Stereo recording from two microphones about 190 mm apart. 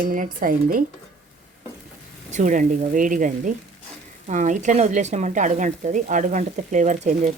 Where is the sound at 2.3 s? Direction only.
40° right (ahead or behind).